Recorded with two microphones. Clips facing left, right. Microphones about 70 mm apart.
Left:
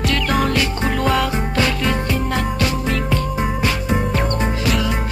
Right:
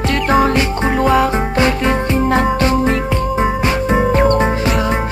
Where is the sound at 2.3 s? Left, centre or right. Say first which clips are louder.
Right 7 dB; right.